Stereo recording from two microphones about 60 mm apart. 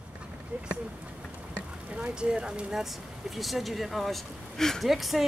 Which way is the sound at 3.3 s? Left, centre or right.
Centre.